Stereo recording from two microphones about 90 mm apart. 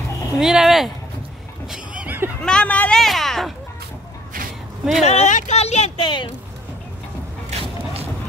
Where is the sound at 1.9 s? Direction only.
15° right (ahead or behind).